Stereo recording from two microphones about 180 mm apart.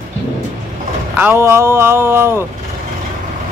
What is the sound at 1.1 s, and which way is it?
Speech, 10° right (ahead or behind).